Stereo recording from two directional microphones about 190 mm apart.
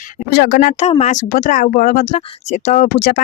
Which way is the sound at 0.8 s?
35° left (ahead or behind).